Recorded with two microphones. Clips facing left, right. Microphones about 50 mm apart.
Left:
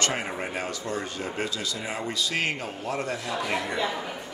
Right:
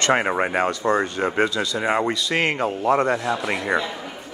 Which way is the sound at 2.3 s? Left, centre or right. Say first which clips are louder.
Right 7 dB; right.